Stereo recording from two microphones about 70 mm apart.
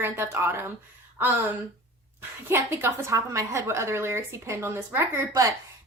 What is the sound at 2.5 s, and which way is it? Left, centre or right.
A woman's voice, right.